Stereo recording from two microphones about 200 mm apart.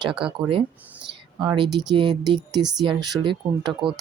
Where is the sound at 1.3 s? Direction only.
25° right (ahead or behind).